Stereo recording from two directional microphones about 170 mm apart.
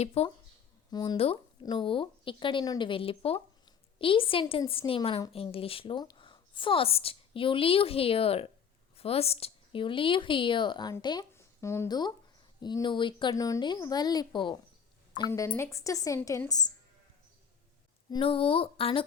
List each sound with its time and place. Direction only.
0.0 s speech: 40° left (ahead or behind)
0.9 s speech: 25° left (ahead or behind)
1.1 s a woman's voice: 35° left (ahead or behind)
11.3 s a woman's voice: 15° left (ahead or behind)
15.3 s a woman's voice: 15° left (ahead or behind)
18.1 s speech: 30° left (ahead or behind)